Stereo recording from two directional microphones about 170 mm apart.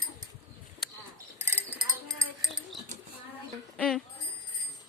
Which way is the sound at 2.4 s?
Centre (ahead or behind).